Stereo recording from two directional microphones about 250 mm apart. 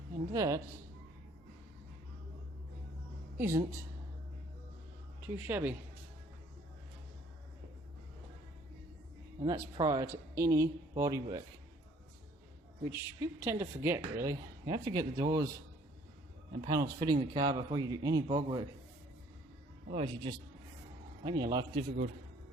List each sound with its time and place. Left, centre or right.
0.3 s a woman's voice: centre
3.3 s a woman's voice: centre
5.2 s a woman's voice: centre
9.4 s a woman's voice: centre
12.8 s a woman's voice: centre
16.6 s a woman's voice: centre
19.9 s a man's voice: right